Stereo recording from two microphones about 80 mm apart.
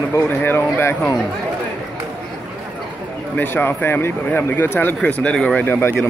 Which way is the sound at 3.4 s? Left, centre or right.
Left.